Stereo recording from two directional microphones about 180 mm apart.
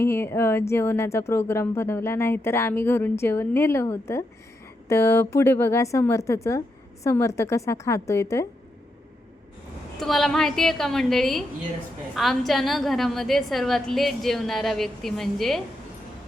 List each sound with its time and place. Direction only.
0.0 s speech: 15° left (ahead or behind)
10.0 s a woman's voice: centre (ahead or behind)